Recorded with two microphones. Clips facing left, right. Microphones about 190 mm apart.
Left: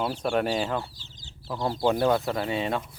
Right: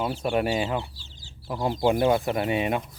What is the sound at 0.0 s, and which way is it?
Speech, 5° right (ahead or behind).